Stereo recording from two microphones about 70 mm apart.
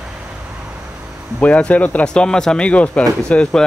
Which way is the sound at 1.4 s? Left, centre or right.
Centre.